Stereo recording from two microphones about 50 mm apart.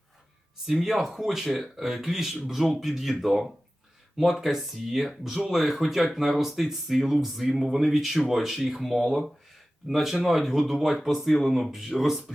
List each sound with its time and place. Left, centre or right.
0.7 s speech: centre